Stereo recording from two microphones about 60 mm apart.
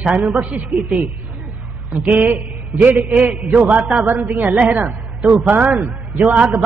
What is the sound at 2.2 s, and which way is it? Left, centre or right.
A man's voice, right.